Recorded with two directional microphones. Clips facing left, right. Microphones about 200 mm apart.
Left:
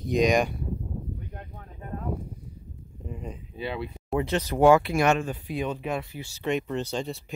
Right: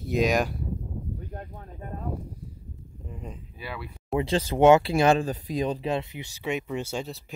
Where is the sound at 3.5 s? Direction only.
25° left (ahead or behind).